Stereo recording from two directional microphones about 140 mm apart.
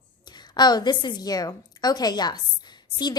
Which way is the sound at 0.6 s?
30° left (ahead or behind).